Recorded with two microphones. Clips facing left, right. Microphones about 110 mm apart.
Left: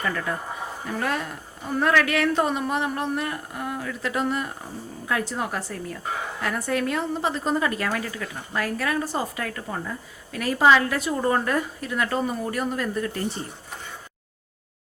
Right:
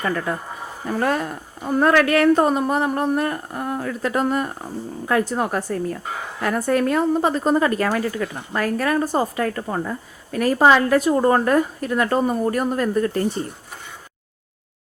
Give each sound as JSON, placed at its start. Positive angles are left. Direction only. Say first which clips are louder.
{"t": 0.9, "sound": "a woman's voice", "louder": "right 6 dB", "side_deg": -40}